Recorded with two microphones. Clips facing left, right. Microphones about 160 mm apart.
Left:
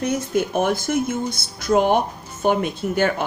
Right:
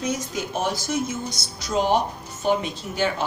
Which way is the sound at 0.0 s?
60° left (ahead or behind).